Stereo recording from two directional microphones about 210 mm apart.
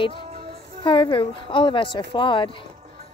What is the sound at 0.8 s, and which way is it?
Speech, 25° left (ahead or behind).